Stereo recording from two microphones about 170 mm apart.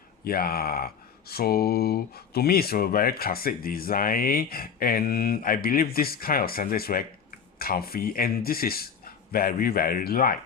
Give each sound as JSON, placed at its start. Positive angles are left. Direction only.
{"t": 0.3, "sound": "speech", "side_deg": 60}